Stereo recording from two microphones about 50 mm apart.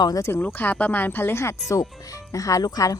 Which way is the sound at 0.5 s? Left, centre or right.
Left.